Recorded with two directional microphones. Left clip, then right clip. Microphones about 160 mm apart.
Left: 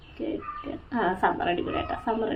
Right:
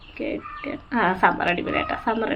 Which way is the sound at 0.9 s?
15° right (ahead or behind).